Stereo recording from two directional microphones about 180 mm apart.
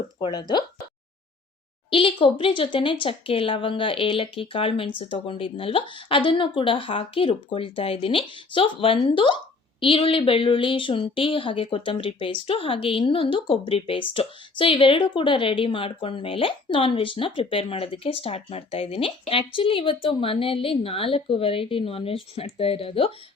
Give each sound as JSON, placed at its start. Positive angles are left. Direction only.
{"t": 0.2, "sound": "speech", "side_deg": 25}
{"t": 1.9, "sound": "speech", "side_deg": 30}